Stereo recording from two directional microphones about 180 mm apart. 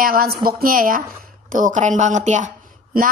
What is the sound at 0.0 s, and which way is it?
Speech, 55° right (ahead or behind).